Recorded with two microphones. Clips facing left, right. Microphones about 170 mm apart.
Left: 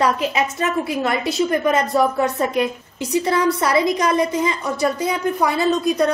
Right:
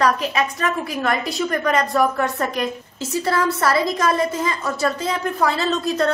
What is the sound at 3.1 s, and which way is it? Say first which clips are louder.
A woman's voice: left 3 dB; 20° left (ahead or behind).